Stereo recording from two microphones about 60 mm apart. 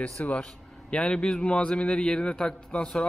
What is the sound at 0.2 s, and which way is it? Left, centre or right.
A man's voice, centre.